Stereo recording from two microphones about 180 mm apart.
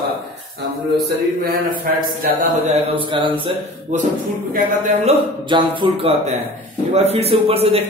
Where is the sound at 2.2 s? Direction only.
40° right (ahead or behind).